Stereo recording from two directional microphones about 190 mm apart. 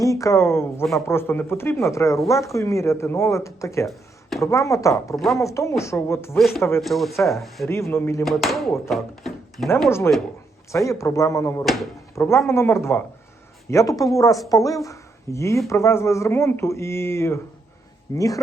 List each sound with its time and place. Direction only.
0.0 s a woman's voice: 15° left (ahead or behind)
3.8 s a sound: centre (ahead or behind)
4.4 s a woman's voice: 15° left (ahead or behind)
5.1 s speech: centre (ahead or behind)
5.4 s a woman's voice: 15° left (ahead or behind)
6.8 s speech: centre (ahead or behind)
7.7 s a woman's voice: 15° left (ahead or behind)
8.2 s speech: centre (ahead or behind)
10.1 s a woman's voice: 10° left (ahead or behind)
11.6 s speech: centre (ahead or behind)
12.1 s a man's voice: 15° left (ahead or behind)